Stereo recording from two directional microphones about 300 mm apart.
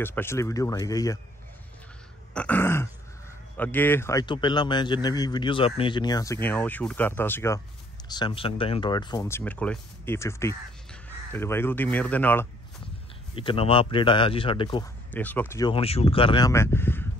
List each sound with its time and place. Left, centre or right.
0.0 s speech: centre
2.3 s speech: centre
13.3 s speech: centre
15.0 s speech: centre